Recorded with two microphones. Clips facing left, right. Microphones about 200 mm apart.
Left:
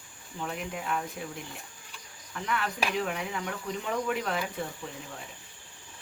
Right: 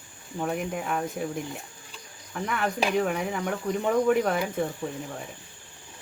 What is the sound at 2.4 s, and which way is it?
Speech, 50° right (ahead or behind).